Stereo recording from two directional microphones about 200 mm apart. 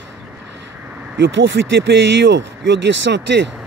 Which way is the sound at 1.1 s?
65° right (ahead or behind).